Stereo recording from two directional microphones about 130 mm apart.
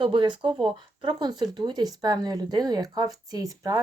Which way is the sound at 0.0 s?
40° right (ahead or behind).